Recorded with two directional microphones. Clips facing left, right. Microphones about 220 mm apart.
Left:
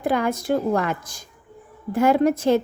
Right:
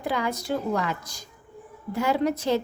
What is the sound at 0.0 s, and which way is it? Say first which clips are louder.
A woman's voice: left 6 dB; 50° left (ahead or behind).